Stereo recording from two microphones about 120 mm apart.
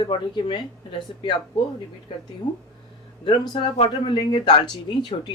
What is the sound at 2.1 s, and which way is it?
Speech, 45° left (ahead or behind).